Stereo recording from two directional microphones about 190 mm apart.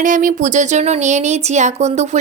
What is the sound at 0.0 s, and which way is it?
Speech, 45° right (ahead or behind).